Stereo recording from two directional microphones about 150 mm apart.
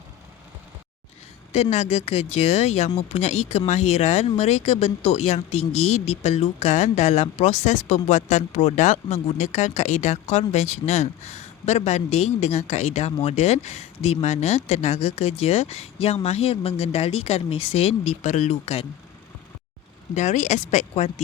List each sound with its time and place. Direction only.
1.7 s speech: 45° left (ahead or behind)
20.1 s speech: 50° left (ahead or behind)